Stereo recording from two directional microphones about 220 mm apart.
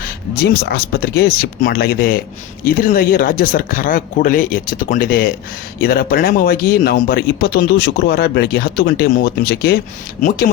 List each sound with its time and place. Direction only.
0.0 s speech: 45° left (ahead or behind)